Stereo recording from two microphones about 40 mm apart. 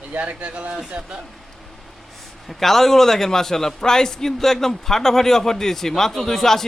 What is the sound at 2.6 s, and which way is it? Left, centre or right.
A man's voice, centre.